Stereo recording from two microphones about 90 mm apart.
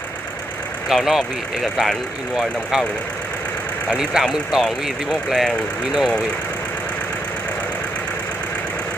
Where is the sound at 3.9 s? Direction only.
5° right (ahead or behind).